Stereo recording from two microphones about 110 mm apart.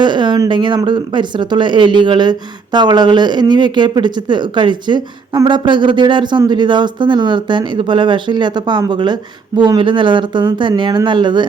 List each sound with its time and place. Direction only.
0.0 s speech: 45° right (ahead or behind)